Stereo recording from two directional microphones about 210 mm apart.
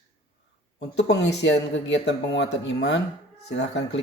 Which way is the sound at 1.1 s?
55° left (ahead or behind).